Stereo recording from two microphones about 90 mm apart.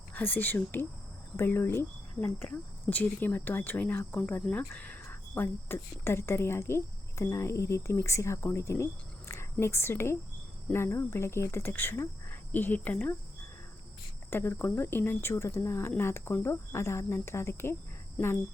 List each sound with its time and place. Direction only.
0.1 s speech: 20° left (ahead or behind)
2.2 s speech: 15° left (ahead or behind)
14.3 s speech: 25° left (ahead or behind)